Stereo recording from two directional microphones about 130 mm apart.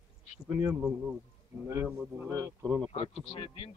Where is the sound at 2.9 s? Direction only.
45° left (ahead or behind).